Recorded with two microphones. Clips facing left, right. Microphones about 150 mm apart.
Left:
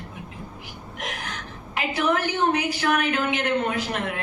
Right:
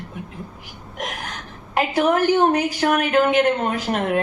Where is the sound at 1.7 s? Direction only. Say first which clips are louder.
Right 5 dB; 45° right (ahead or behind).